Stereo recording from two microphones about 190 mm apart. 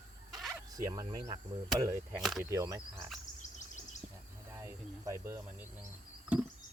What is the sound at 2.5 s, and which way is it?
Speech, 15° right (ahead or behind).